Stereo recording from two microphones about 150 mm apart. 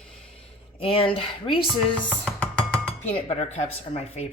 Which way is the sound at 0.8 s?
35° left (ahead or behind).